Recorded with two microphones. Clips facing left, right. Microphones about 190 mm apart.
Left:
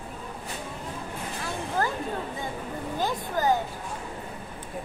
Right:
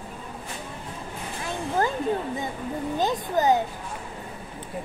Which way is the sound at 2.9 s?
20° right (ahead or behind).